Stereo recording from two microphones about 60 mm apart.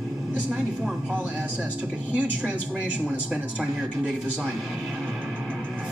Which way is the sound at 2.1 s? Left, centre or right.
Right.